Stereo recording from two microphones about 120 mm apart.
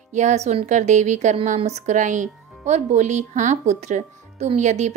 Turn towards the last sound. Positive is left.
turn(degrees=-75)  # may be behind; listen again after turning